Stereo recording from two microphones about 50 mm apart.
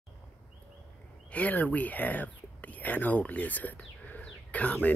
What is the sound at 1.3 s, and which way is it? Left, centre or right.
Speech, left.